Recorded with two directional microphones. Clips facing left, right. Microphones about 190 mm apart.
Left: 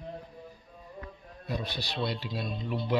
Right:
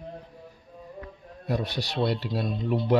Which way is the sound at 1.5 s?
80° right.